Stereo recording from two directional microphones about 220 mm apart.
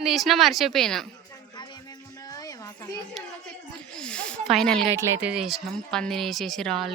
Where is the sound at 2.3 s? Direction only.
15° left (ahead or behind).